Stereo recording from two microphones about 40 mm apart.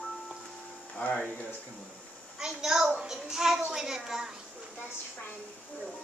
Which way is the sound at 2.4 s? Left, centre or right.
Centre.